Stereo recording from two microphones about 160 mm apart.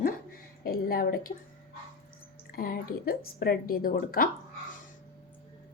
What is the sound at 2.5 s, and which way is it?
Speech, 70° left (ahead or behind).